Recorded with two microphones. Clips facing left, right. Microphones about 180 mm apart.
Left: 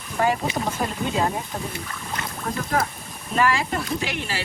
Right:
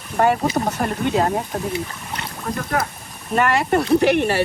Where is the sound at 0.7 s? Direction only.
65° right (ahead or behind).